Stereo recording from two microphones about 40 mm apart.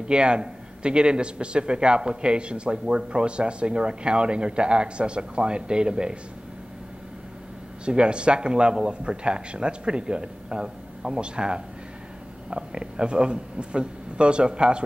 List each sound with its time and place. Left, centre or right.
0.1 s a man's voice: right
7.8 s a man's voice: right